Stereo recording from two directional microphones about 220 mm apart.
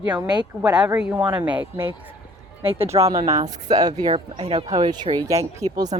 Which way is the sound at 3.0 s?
15° right (ahead or behind).